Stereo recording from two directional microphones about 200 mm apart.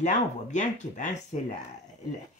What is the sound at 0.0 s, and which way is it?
Speech, 35° left (ahead or behind).